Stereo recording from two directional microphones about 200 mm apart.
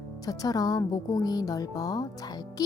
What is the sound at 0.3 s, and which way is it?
Speech, 20° left (ahead or behind).